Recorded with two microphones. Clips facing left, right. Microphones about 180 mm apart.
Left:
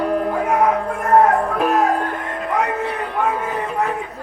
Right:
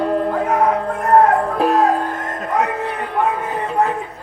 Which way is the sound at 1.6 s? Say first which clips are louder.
Right 3 dB; 35° right (ahead or behind).